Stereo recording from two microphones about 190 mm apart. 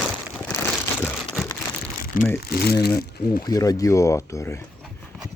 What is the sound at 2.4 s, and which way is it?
Speech, 55° left (ahead or behind).